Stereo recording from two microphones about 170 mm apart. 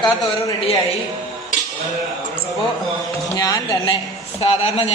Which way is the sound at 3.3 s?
20° left (ahead or behind).